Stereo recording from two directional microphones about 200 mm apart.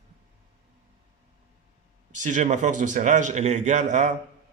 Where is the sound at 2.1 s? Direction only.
40° right (ahead or behind).